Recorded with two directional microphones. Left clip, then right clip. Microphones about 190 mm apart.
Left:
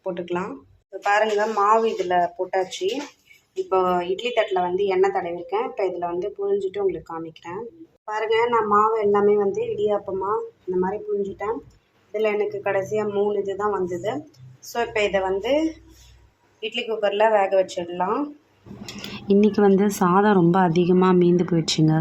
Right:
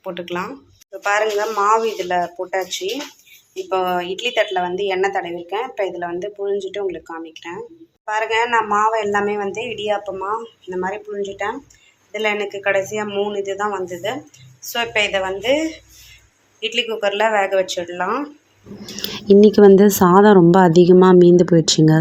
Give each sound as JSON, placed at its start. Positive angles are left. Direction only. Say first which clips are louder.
{"t": 0.0, "sound": "a woman's voice", "louder": "right 2 dB", "side_deg": 0}
{"t": 19.0, "sound": "speech", "louder": "right 9 dB", "side_deg": -25}